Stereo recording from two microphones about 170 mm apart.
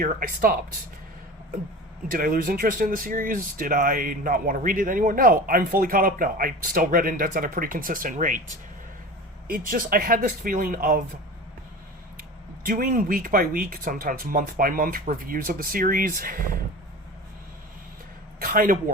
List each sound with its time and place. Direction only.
0.0 s speech: 60° right (ahead or behind)
2.0 s speech: 55° right (ahead or behind)
12.6 s speech: 55° right (ahead or behind)
18.3 s speech: 60° right (ahead or behind)